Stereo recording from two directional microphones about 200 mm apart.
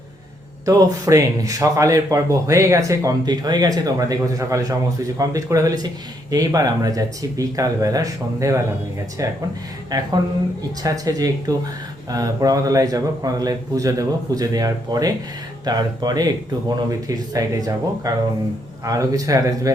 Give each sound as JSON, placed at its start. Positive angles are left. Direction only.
{"t": 0.6, "sound": "speech", "side_deg": -15}